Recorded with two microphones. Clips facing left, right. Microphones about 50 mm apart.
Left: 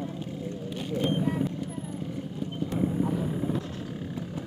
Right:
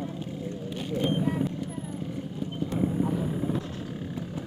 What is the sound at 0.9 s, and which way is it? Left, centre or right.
Vehicle, centre.